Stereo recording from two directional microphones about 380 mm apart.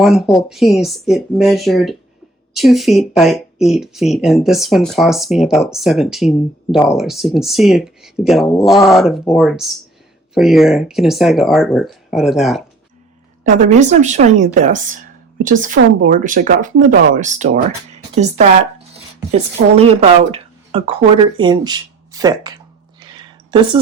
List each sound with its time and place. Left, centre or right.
0.0 s speech: centre
13.4 s speech: centre